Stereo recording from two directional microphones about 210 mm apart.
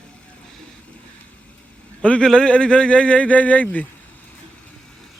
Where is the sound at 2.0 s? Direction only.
5° left (ahead or behind).